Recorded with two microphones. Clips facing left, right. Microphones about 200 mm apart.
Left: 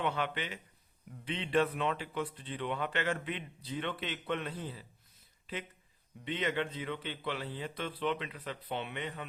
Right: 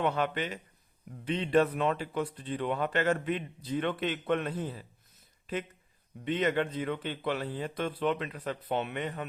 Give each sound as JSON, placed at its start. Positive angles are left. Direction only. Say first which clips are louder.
{"t": 0.0, "sound": "speech", "louder": "right 5 dB", "side_deg": -45}